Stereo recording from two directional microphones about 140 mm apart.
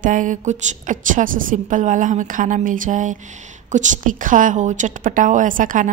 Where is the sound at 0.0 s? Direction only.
65° right (ahead or behind).